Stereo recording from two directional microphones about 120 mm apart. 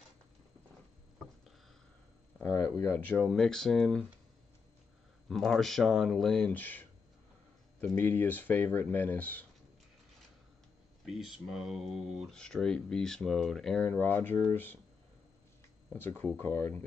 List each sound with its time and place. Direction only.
2.3 s speech: 10° left (ahead or behind)
5.3 s speech: centre (ahead or behind)
6.5 s speech: 15° left (ahead or behind)
11.1 s speech: centre (ahead or behind)
13.8 s speech: 15° left (ahead or behind)
15.9 s speech: 15° left (ahead or behind)